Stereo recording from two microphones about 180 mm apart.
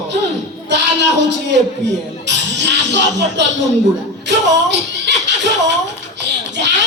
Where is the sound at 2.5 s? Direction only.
75° right (ahead or behind).